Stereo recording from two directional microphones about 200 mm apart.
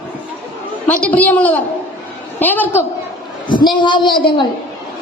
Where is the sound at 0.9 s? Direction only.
10° left (ahead or behind).